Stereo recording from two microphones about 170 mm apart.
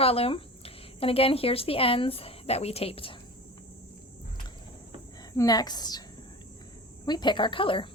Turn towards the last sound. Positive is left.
turn(degrees=30)  # may be behind; listen again after turning